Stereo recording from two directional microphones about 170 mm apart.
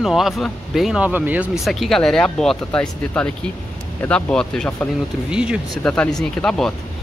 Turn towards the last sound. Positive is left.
turn(degrees=5)  # may be behind; listen again after turning